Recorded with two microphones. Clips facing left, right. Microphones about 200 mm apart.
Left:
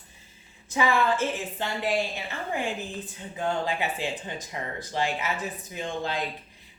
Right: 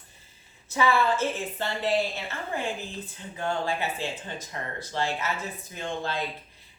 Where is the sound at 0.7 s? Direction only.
15° left (ahead or behind).